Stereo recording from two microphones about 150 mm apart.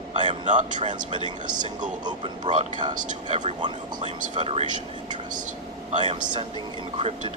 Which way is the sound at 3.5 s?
30° right (ahead or behind).